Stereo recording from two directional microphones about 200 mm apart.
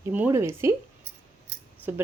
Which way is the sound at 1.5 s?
60° right (ahead or behind).